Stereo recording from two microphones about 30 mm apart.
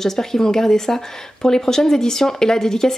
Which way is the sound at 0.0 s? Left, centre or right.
Centre.